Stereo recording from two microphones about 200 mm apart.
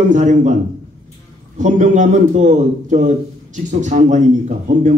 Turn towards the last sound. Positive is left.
turn(degrees=-35)  # may be behind; listen again after turning